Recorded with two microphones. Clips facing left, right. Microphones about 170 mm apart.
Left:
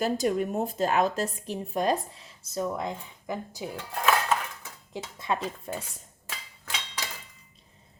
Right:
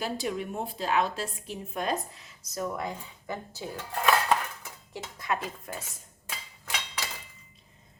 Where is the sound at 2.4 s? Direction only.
25° left (ahead or behind).